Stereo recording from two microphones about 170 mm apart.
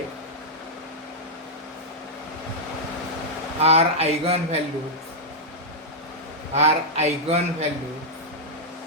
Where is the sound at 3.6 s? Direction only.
35° right (ahead or behind).